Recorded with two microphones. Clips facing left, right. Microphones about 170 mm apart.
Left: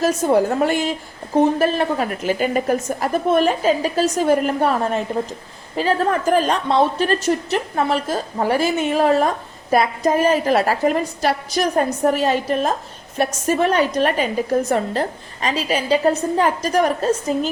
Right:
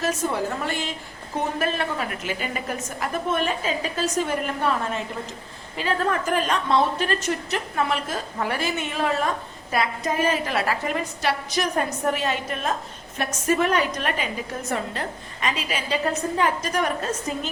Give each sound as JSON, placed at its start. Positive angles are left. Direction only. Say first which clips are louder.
{"t": 0.0, "sound": "a woman's voice", "louder": "left 8 dB", "side_deg": 45}
{"t": 1.5, "sound": "a woman's voice", "louder": "left 7 dB", "side_deg": 35}